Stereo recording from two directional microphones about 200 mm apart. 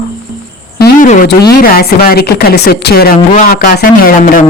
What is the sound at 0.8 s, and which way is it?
Speech, 45° left (ahead or behind).